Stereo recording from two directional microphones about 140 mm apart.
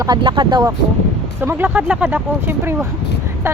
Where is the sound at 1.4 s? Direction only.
15° right (ahead or behind).